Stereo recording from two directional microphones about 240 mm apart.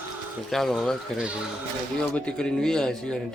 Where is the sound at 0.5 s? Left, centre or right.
Centre.